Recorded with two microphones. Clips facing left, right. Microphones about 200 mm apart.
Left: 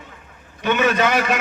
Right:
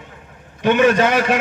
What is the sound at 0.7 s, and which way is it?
Speech, 50° right (ahead or behind).